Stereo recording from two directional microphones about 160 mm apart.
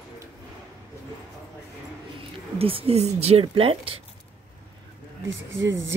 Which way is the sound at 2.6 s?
35° right (ahead or behind).